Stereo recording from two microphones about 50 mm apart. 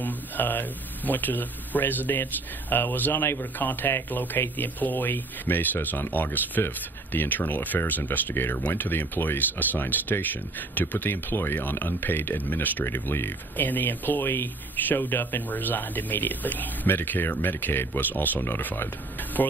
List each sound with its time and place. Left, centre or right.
0.0 s speech: left